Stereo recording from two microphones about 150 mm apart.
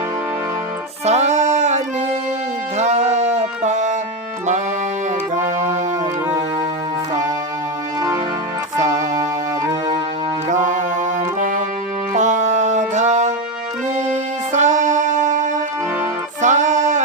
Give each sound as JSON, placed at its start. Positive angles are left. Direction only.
{"t": 1.0, "sound": "music", "side_deg": -50}
{"t": 5.3, "sound": "music", "side_deg": -55}
{"t": 8.8, "sound": "music", "side_deg": -55}
{"t": 10.5, "sound": "music", "side_deg": -55}